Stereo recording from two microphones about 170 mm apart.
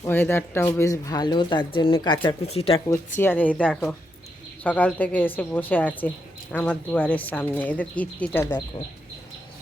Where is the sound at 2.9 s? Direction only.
10° left (ahead or behind).